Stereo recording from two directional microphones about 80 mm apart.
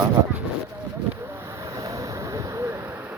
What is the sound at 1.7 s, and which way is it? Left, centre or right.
Vehicle, right.